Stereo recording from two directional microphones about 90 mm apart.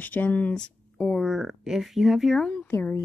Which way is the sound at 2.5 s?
15° left (ahead or behind).